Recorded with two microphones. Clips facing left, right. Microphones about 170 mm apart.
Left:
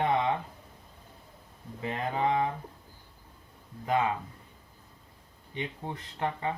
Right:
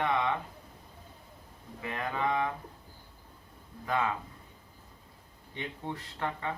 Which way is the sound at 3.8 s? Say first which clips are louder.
Left 3 dB; 20° left (ahead or behind).